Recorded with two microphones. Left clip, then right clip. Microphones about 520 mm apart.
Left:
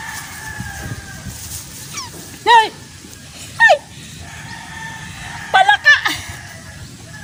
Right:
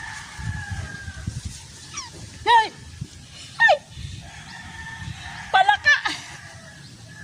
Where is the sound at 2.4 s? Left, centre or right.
Right.